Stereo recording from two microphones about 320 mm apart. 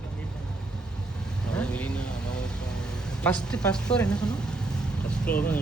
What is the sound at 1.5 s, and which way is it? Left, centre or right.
Vehicle, centre.